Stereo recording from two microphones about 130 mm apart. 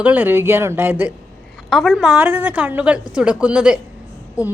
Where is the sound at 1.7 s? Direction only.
Centre (ahead or behind).